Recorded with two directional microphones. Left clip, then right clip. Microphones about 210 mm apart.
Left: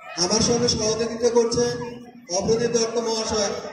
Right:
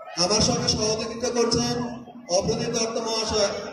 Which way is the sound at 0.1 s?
35° right (ahead or behind).